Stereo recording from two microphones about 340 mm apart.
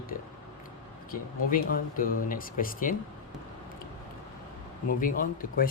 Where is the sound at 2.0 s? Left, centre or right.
Left.